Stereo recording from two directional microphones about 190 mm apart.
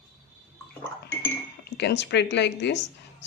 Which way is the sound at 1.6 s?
60° left (ahead or behind).